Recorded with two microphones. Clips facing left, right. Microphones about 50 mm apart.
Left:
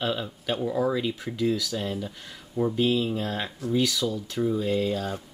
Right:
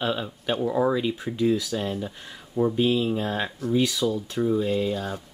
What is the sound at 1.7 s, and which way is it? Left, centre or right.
Speech, centre.